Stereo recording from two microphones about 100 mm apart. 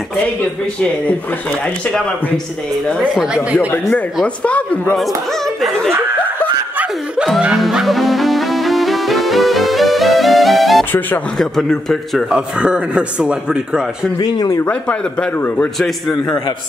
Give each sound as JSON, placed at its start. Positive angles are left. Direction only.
{"t": 2.9, "sound": "a man's voice", "side_deg": -5}
{"t": 3.5, "sound": "a man's voice", "side_deg": 15}
{"t": 7.2, "sound": "music", "side_deg": -5}
{"t": 11.3, "sound": "a man's voice", "side_deg": 5}
{"t": 12.3, "sound": "a man's voice", "side_deg": -10}
{"t": 14.2, "sound": "speech", "side_deg": 40}
{"t": 15.4, "sound": "a man's voice", "side_deg": 10}